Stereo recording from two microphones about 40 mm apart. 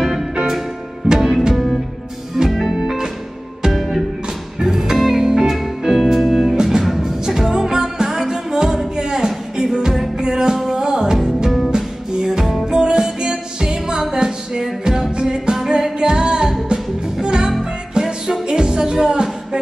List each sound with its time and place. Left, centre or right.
0.0 s music: centre
1.0 s music: right
1.5 s music: centre
3.7 s music: centre
4.6 s music: centre